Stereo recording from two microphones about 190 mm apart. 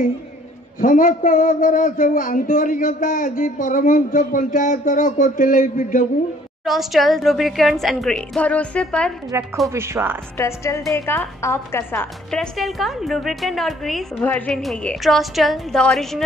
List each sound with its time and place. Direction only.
0.7 s speech: 45° left (ahead or behind)
6.6 s a woman's voice: centre (ahead or behind)
9.3 s speech: 15° right (ahead or behind)
10.3 s a woman's voice: 15° left (ahead or behind)